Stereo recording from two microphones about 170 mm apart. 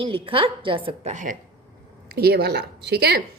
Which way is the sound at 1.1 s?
50° right (ahead or behind).